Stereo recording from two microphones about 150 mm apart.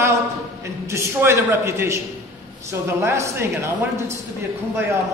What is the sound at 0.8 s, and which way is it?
A man's voice, 15° right (ahead or behind).